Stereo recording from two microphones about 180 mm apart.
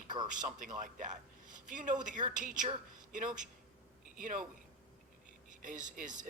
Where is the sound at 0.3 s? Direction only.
45° right (ahead or behind).